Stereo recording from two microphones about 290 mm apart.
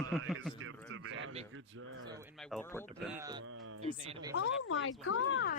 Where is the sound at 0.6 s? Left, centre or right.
Right.